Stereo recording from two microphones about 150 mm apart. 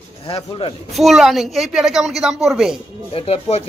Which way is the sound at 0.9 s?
Centre (ahead or behind).